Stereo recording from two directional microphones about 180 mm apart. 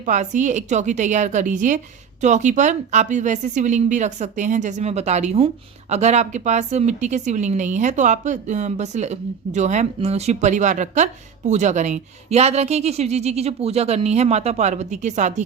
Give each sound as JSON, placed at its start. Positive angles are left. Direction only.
{"t": 0.0, "sound": "a woman's voice", "side_deg": -45}